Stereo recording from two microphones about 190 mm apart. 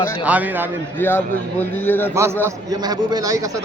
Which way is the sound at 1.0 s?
10° left (ahead or behind).